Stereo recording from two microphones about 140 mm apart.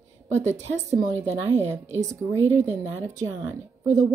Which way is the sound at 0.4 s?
55° right (ahead or behind).